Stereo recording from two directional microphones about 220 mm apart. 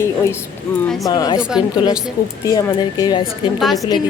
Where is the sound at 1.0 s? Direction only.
15° left (ahead or behind).